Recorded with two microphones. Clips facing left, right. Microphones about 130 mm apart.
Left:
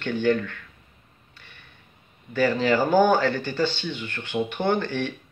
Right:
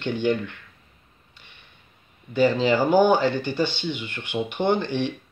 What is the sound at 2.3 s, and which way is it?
Speech, 15° right (ahead or behind).